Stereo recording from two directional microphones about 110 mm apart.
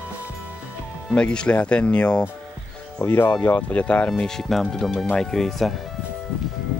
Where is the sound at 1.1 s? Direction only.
10° left (ahead or behind).